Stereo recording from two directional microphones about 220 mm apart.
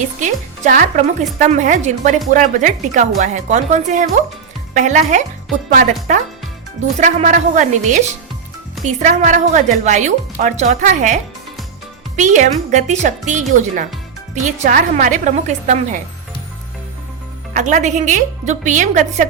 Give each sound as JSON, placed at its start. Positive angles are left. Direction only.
{"t": 0.2, "sound": "speech", "side_deg": -35}
{"t": 17.5, "sound": "speech", "side_deg": -35}